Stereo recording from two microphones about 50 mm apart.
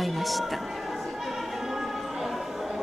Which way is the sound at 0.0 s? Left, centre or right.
Centre.